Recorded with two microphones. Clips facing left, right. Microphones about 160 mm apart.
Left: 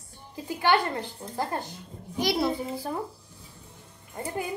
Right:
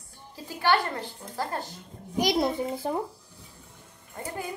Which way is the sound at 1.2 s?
35° left (ahead or behind).